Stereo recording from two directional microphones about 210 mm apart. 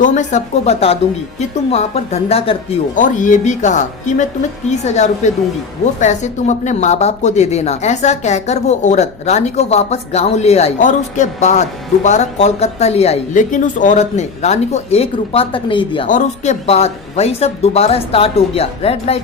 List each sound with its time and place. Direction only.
0.0 s speech: 35° left (ahead or behind)
16.0 s speech: 35° left (ahead or behind)